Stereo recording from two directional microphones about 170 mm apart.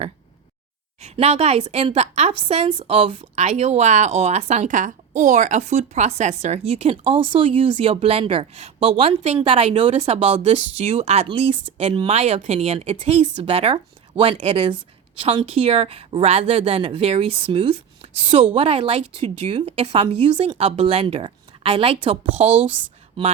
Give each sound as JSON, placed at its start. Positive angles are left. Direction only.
{"t": 1.0, "sound": "speech", "side_deg": -35}